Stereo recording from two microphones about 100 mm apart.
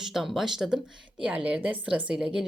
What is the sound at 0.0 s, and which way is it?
Speech, 5° right (ahead or behind).